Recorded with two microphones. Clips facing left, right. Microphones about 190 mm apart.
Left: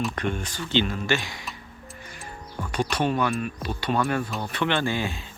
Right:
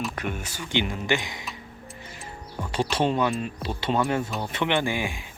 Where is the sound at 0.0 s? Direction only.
5° right (ahead or behind).